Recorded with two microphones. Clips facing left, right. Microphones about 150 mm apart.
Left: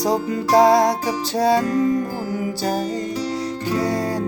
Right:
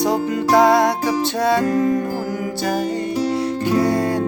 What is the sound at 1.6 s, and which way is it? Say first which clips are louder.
Music: right 2 dB; 50° right (ahead or behind).